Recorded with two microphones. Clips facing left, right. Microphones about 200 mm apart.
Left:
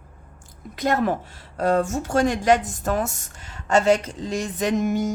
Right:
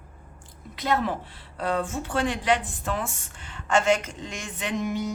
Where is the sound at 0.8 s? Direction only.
45° left (ahead or behind).